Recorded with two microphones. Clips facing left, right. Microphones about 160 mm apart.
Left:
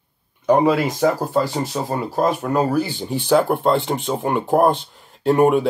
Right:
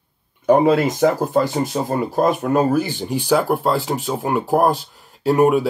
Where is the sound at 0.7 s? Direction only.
20° right (ahead or behind).